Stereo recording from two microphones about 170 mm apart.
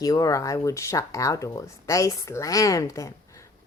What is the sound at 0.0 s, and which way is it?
Speech, 20° left (ahead or behind).